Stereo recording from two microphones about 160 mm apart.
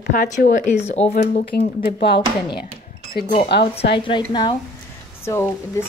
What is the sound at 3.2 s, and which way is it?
Speech, 75° left (ahead or behind).